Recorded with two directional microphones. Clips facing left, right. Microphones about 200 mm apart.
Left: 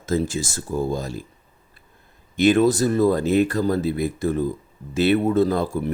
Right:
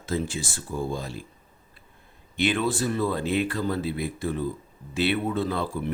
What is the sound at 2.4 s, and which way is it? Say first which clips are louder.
Speech: left 8 dB; 45° left (ahead or behind).